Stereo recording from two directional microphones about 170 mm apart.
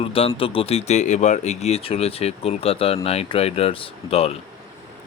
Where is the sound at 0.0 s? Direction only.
35° left (ahead or behind).